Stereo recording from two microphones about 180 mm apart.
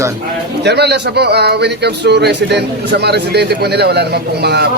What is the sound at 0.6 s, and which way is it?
A man's voice, 65° right (ahead or behind).